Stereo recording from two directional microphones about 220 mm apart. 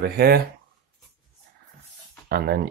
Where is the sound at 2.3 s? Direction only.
45° right (ahead or behind).